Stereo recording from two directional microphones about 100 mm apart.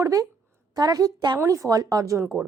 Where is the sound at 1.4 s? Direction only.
30° right (ahead or behind).